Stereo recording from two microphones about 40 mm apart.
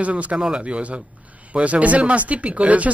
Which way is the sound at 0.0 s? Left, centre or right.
Right.